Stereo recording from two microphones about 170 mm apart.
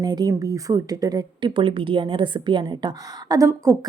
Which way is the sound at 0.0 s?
25° right (ahead or behind).